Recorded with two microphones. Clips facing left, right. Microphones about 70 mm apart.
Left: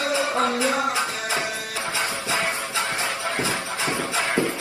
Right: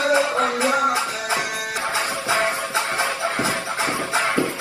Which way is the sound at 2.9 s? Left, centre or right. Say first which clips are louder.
Right 3 dB; right.